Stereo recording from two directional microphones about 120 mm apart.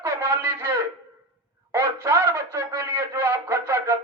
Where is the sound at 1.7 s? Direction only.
20° right (ahead or behind).